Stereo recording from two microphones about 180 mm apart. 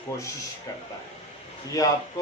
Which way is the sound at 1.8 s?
20° left (ahead or behind).